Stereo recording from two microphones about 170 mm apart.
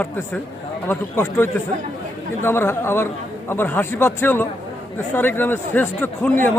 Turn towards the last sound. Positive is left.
turn(degrees=10)  # may be behind; listen again after turning